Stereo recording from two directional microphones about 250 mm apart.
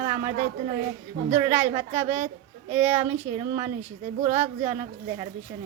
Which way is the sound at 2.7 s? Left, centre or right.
Centre.